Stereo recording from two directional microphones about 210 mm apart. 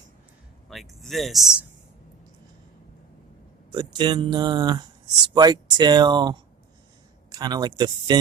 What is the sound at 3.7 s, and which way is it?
Speech, 20° right (ahead or behind).